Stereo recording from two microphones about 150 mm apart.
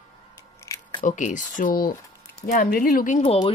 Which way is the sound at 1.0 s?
55° left (ahead or behind).